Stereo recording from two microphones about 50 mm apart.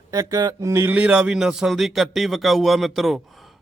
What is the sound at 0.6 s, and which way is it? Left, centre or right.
Speech, right.